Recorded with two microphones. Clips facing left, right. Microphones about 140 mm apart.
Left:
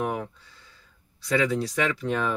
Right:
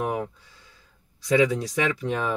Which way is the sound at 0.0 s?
20° right (ahead or behind).